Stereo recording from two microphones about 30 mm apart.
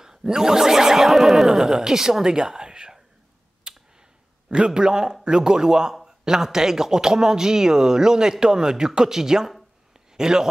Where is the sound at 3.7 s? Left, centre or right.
Right.